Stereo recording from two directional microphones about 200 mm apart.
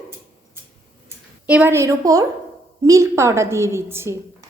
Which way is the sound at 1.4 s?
10° right (ahead or behind).